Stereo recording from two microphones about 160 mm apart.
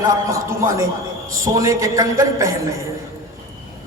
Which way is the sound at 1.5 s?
20° right (ahead or behind).